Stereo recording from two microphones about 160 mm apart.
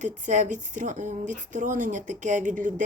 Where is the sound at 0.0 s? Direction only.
50° right (ahead or behind).